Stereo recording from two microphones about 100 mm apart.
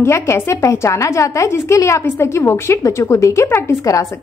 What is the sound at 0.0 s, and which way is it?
A woman's voice, 25° left (ahead or behind).